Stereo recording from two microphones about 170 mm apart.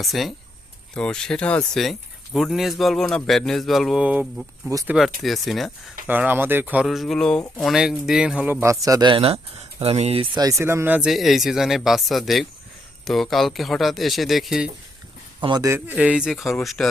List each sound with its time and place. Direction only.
0.0 s speech: centre (ahead or behind)
4.7 s a man's voice: 20° right (ahead or behind)
4.9 s speech: centre (ahead or behind)
6.8 s a man's voice: centre (ahead or behind); by 10.4 s 35° right (ahead or behind)
10.4 s speech: 15° right (ahead or behind)
15.4 s speech: 25° right (ahead or behind); by 16.9 s 5° left (ahead or behind)